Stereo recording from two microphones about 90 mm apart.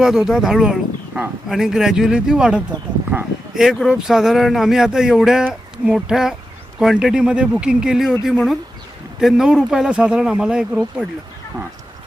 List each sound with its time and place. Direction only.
0.0 s speech: 5° right (ahead or behind)
3.1 s a sound: 20° right (ahead or behind)
3.5 s speech: 5° right (ahead or behind)